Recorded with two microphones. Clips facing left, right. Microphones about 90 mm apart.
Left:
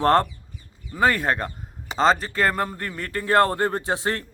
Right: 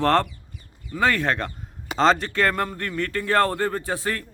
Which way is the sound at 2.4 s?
15° left (ahead or behind).